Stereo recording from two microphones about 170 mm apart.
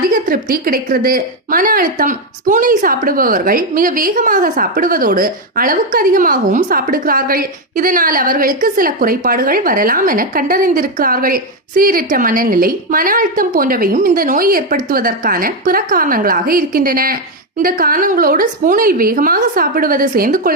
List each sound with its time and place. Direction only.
0.1 s a woman's voice: 55° right (ahead or behind)